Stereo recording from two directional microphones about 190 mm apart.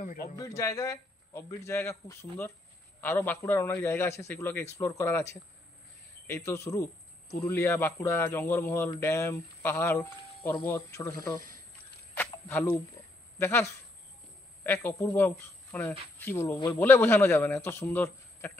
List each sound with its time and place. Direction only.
0.0 s a man's voice: 40° left (ahead or behind)
0.4 s a man's voice: 15° left (ahead or behind)
12.2 s a sound: 10° left (ahead or behind)
13.4 s a man's voice: 15° left (ahead or behind)